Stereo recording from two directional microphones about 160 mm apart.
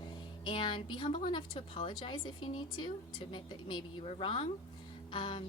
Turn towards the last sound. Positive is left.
turn(degrees=30)  # may be behind; listen again after turning